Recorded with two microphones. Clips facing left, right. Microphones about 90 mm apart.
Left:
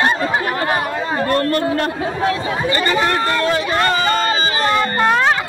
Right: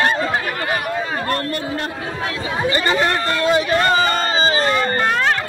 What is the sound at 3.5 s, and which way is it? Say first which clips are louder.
Speech: right 1 dB; 20° right (ahead or behind).